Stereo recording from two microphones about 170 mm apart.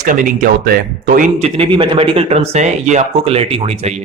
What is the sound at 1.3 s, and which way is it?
A man's voice, 35° right (ahead or behind).